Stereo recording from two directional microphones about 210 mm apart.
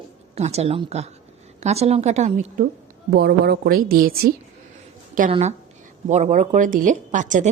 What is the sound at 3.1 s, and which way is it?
A woman's voice, 50° right (ahead or behind).